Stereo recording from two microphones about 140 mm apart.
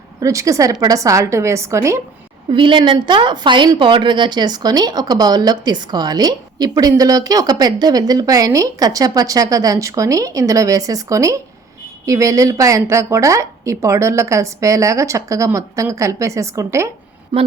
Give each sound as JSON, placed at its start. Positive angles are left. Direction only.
{"t": 0.2, "sound": "a woman's voice", "side_deg": -25}
{"t": 2.5, "sound": "a woman's voice", "side_deg": -35}
{"t": 17.3, "sound": "speech", "side_deg": -35}